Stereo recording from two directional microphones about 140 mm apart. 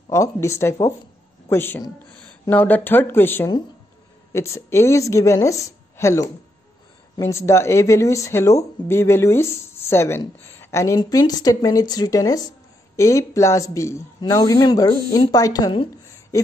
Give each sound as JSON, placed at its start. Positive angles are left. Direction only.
{"t": 0.1, "sound": "speech", "side_deg": 20}